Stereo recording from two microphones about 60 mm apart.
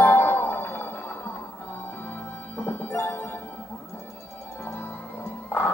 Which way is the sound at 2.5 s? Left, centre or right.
Left.